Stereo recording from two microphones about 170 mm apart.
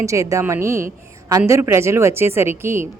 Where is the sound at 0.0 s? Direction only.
20° right (ahead or behind).